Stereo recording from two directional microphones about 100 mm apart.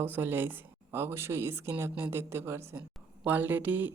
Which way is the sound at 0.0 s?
20° right (ahead or behind).